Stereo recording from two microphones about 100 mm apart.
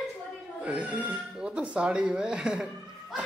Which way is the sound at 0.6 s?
10° right (ahead or behind).